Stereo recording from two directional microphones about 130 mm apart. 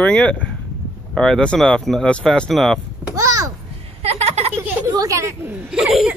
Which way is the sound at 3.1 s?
25° right (ahead or behind).